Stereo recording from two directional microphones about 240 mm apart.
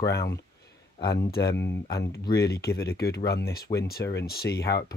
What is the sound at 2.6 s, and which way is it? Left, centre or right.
Speech, left.